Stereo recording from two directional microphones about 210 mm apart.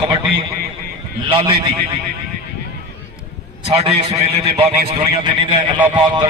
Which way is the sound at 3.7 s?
25° right (ahead or behind).